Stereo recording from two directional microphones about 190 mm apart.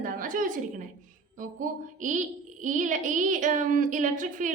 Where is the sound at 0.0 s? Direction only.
45° right (ahead or behind).